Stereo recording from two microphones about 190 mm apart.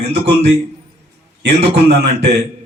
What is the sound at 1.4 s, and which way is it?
Speech, 60° right (ahead or behind).